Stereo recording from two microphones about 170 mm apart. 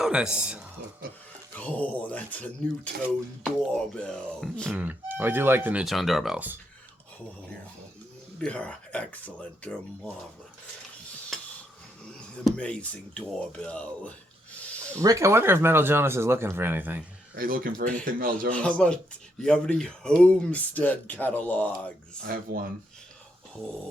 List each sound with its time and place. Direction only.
0.0 s speech: 5° right (ahead or behind)
1.5 s speech: 10° left (ahead or behind)
3.9 s music: 5° left (ahead or behind)
4.7 s speech: 10° right (ahead or behind)
8.4 s speech: 5° left (ahead or behind)
11.3 s stir: centre (ahead or behind)
12.5 s speech: 5° left (ahead or behind)
14.6 s a sound: 5° left (ahead or behind)
15.0 s speech: 20° right (ahead or behind)
17.3 s speech: 60° right (ahead or behind)
18.5 s music: 5° left (ahead or behind)
19.4 s speech: 5° left (ahead or behind)
22.2 s speech: 60° right (ahead or behind)